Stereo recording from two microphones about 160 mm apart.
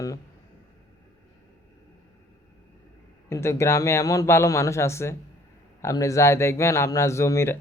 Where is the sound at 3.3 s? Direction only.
15° left (ahead or behind).